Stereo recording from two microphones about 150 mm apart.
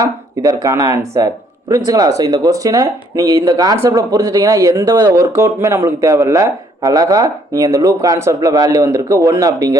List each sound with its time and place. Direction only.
0.0 s speech: 20° right (ahead or behind)